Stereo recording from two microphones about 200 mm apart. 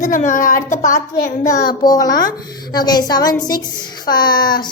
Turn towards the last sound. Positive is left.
turn(degrees=20)  # may be behind; listen again after turning